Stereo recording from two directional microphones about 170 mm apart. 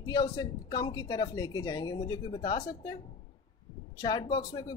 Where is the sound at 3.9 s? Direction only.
25° left (ahead or behind).